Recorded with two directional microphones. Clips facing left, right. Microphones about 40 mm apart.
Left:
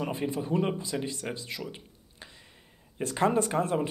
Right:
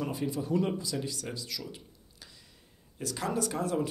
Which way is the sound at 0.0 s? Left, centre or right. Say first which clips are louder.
Left 2 dB; left.